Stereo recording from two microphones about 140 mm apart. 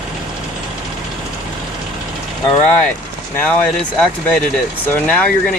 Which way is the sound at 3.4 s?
10° left (ahead or behind).